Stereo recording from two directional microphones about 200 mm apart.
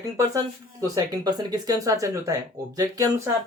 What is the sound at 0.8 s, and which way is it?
Speech, 20° right (ahead or behind).